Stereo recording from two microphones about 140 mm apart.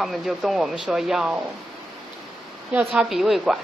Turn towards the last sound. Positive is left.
turn(degrees=-5)  # may be behind; listen again after turning